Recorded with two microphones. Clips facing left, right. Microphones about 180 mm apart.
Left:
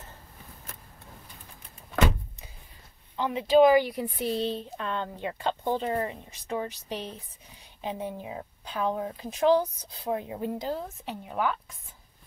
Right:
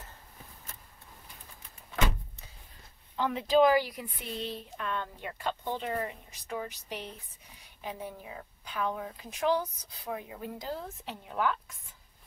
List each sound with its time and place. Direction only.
3.3 s speech: 10° left (ahead or behind)
3.9 s a woman's voice: 35° left (ahead or behind); by 11.5 s 20° left (ahead or behind)